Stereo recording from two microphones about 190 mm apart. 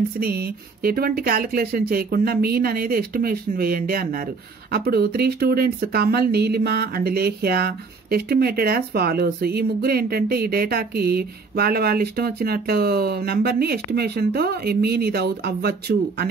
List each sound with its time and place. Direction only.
0.2 s speech: 55° right (ahead or behind)